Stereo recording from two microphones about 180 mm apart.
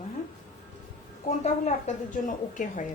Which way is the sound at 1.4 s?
40° left (ahead or behind).